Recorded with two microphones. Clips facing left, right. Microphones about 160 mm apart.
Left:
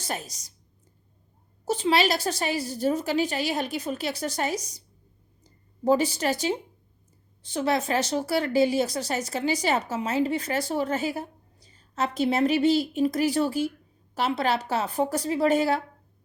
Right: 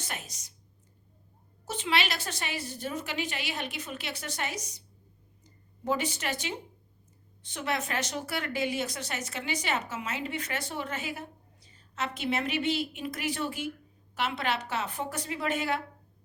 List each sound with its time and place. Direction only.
0.0 s speech: 35° left (ahead or behind)
1.6 s speech: 35° left (ahead or behind)